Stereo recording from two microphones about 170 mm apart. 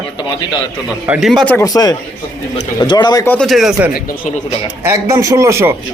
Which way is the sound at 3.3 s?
5° left (ahead or behind).